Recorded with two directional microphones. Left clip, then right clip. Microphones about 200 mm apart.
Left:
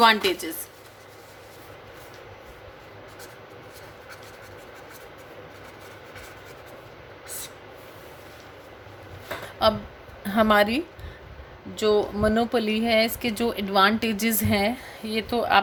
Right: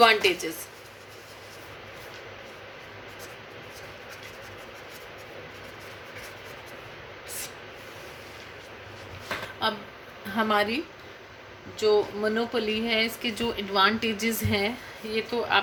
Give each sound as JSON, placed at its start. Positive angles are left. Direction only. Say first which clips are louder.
{"t": 0.0, "sound": "speech", "louder": "left 1 dB", "side_deg": 55}
{"t": 9.6, "sound": "speech", "louder": "left 9 dB", "side_deg": 55}
{"t": 11.8, "sound": "speech", "louder": "left 2 dB", "side_deg": 60}